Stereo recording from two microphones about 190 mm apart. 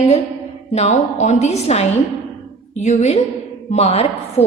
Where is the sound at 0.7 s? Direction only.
35° left (ahead or behind).